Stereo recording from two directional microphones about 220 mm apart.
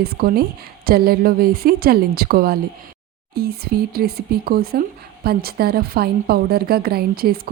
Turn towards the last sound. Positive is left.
turn(degrees=-45)  # may be behind; listen again after turning